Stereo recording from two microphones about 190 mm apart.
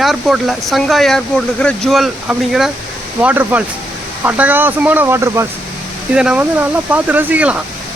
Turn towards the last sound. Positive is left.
turn(degrees=-5)  # may be behind; listen again after turning